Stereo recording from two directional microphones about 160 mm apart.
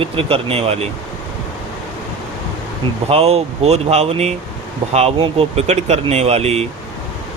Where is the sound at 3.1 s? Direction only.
40° right (ahead or behind).